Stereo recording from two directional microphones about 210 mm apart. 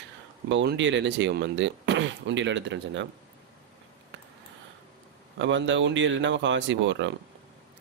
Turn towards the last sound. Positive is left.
turn(degrees=-60)  # may be behind; listen again after turning